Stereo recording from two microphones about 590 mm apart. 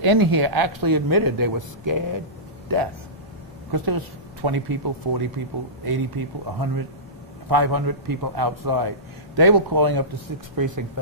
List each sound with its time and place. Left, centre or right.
0.0 s speech: right